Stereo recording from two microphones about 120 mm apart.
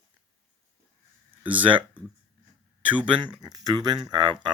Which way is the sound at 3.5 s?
30° right (ahead or behind).